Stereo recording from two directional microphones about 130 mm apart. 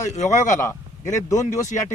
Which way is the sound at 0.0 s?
65° left (ahead or behind).